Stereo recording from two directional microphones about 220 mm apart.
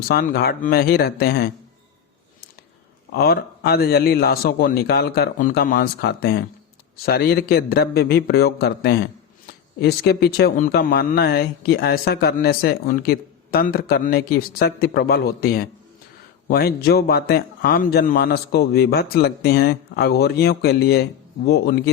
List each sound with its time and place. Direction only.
0.1 s speech: 45° left (ahead or behind)
3.1 s speech: 45° left (ahead or behind)